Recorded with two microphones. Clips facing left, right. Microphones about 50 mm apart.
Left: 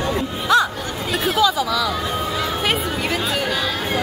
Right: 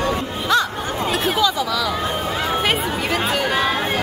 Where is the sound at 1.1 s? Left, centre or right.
Centre.